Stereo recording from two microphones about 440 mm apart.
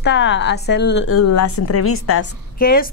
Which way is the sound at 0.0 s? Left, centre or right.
Left.